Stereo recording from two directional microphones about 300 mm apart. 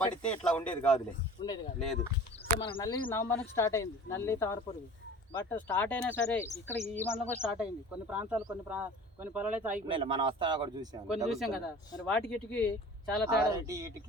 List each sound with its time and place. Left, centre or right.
0.0 s speech: centre
2.6 s speech: centre
9.8 s speech: centre
11.3 s speech: centre
13.5 s speech: centre